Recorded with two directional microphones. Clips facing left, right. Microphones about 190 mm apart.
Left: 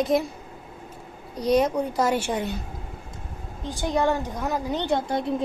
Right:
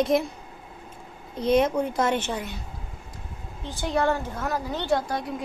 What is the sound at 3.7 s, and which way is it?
A woman's voice, 15° left (ahead or behind).